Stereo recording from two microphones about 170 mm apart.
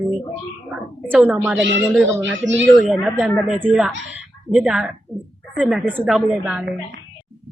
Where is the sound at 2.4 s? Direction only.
90° right.